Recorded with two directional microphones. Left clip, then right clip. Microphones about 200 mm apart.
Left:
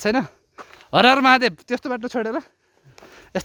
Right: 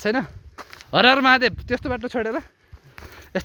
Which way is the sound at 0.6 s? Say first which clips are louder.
Right 1 dB; 65° right (ahead or behind).